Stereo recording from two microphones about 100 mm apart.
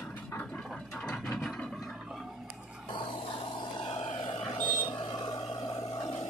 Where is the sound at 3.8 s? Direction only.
65° left (ahead or behind).